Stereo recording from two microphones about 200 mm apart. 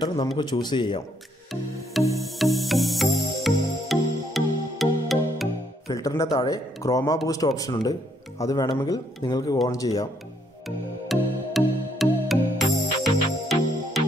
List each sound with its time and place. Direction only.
0.0 s speech: 20° left (ahead or behind)
2.1 s music: centre (ahead or behind)
5.9 s speech: 15° left (ahead or behind)
11.1 s music: centre (ahead or behind)